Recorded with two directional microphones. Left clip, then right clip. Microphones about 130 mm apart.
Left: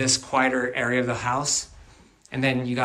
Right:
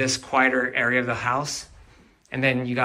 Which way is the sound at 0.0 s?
20° left (ahead or behind).